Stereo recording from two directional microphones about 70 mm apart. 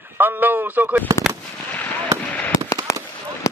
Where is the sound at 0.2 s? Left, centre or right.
Right.